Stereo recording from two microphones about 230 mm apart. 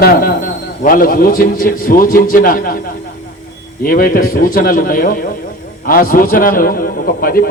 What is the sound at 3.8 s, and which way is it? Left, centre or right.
A man's voice, left.